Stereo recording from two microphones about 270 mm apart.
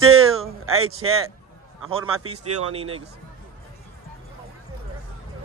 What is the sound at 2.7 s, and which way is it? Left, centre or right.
Speech, right.